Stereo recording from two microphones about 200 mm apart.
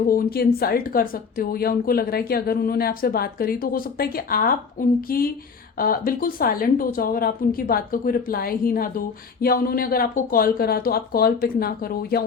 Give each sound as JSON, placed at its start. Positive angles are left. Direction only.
{"t": 0.1, "sound": "speech", "side_deg": 50}